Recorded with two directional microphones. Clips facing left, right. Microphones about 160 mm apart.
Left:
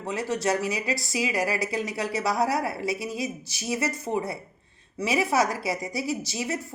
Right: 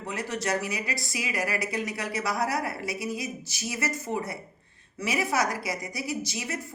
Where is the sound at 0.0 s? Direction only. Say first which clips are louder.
Left 4 dB; 30° left (ahead or behind).